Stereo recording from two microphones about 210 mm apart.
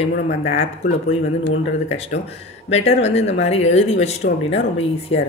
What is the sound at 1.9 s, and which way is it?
Speech, 30° left (ahead or behind).